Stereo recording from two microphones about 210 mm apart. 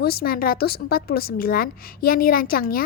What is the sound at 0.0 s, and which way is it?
A woman's voice, 45° left (ahead or behind).